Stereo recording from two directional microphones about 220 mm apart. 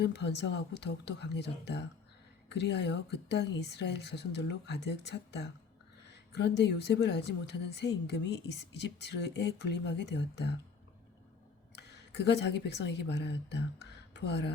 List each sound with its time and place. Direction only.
0.0 s speech: 50° left (ahead or behind)
11.8 s speech: 50° left (ahead or behind)